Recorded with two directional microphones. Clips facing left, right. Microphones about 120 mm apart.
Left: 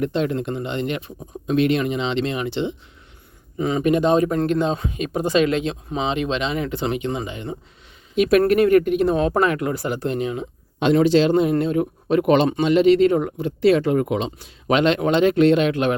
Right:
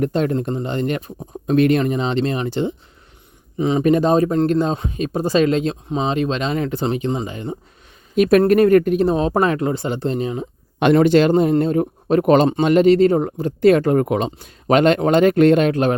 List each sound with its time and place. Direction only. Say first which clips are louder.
0.0 s speech: right 3 dB; 40° right (ahead or behind)
3.6 s speech: right 3 dB; 25° right (ahead or behind)
3.8 s speech: right 1 dB; 40° right (ahead or behind)
10.9 s speech: right 2 dB; 55° right (ahead or behind); by 16.0 s 40° right (ahead or behind)